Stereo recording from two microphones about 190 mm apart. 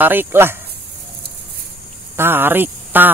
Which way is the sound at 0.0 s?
10° right (ahead or behind).